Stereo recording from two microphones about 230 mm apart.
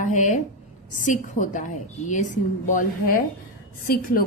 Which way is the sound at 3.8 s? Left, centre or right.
Left.